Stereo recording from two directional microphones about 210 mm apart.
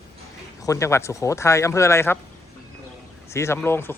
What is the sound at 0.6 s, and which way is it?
A man's voice, 15° left (ahead or behind).